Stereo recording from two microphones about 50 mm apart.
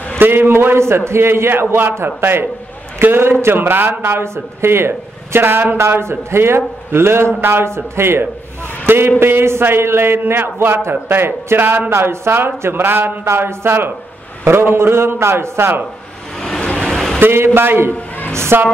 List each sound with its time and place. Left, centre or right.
0.2 s a man's voice: right
4.0 s a man's voice: right
5.8 s a man's voice: right
16.8 s a sound: centre
17.2 s a man's voice: right
18.3 s a man's voice: right